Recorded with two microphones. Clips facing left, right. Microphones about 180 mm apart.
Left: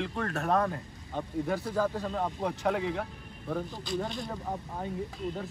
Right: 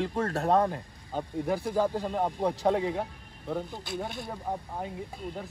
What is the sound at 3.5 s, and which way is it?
Speech, 15° right (ahead or behind).